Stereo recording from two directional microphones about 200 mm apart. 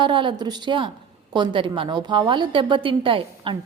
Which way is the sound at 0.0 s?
25° right (ahead or behind).